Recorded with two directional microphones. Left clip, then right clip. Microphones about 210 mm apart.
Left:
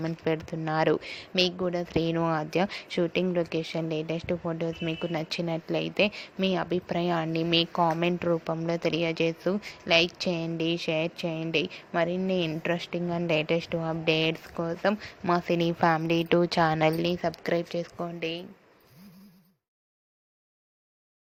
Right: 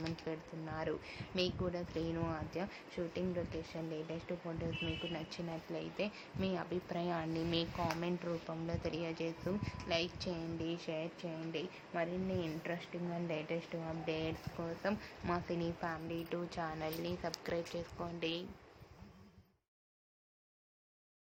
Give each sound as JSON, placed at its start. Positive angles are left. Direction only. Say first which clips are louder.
{"t": 0.0, "sound": "a woman's voice", "louder": "left 14 dB", "side_deg": 40}